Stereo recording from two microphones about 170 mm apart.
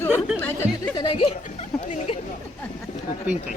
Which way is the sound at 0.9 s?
30° left (ahead or behind).